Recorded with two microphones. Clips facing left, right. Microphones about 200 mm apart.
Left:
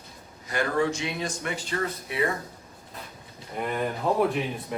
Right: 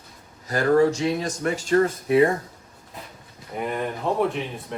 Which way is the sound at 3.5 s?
Centre (ahead or behind).